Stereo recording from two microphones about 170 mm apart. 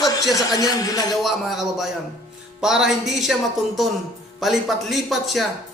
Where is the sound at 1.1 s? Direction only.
Centre (ahead or behind).